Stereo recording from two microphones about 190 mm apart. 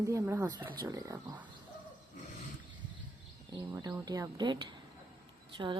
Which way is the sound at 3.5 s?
20° right (ahead or behind).